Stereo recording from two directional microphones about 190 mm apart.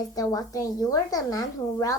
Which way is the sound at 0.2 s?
20° left (ahead or behind).